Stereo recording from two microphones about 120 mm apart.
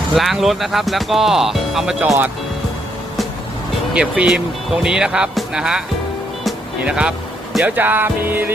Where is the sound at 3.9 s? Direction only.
10° right (ahead or behind).